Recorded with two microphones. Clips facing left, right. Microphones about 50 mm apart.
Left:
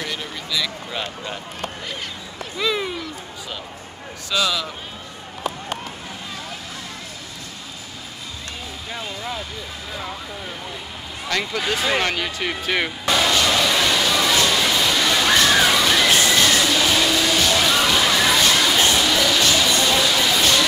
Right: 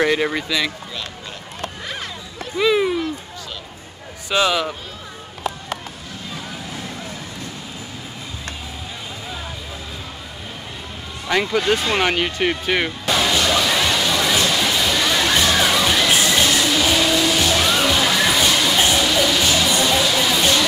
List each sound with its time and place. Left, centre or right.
0.0 s speech: right
2.5 s speech: centre
4.3 s speech: right
11.2 s speech: centre
12.0 s music: centre
16.1 s a sound: centre
16.4 s music: centre